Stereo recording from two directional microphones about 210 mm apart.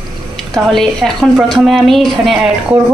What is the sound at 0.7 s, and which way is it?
A woman's voice, centre (ahead or behind).